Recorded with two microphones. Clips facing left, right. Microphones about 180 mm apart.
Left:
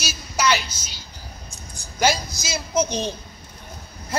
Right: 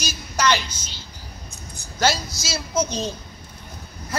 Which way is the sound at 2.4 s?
15° left (ahead or behind).